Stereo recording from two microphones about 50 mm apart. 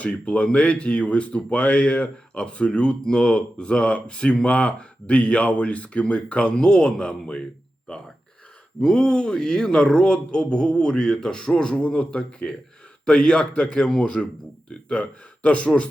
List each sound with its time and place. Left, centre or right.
0.0 s a man's voice: left